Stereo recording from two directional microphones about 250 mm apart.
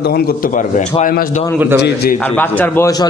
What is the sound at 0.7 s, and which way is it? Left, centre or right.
Speech, left.